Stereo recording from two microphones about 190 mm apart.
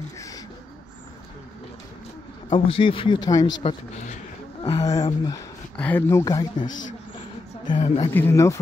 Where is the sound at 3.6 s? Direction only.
40° left (ahead or behind).